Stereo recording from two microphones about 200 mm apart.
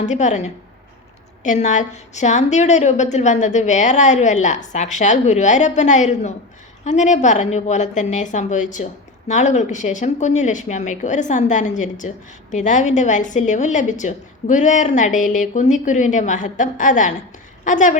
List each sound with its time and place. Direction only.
0.0 s a woman's voice: 35° left (ahead or behind)